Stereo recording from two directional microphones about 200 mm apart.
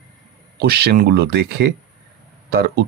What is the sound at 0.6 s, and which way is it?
Speech, 55° right (ahead or behind).